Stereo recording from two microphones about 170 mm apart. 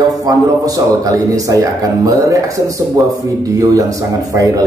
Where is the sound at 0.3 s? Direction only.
20° right (ahead or behind).